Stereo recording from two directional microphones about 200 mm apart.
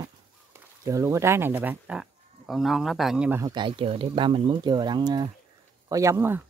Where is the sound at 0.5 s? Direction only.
15° right (ahead or behind).